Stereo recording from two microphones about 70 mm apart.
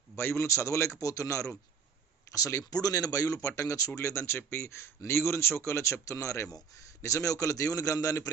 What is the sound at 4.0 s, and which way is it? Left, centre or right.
A man's voice, left.